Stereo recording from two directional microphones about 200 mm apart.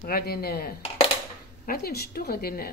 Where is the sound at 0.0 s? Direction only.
50° left (ahead or behind).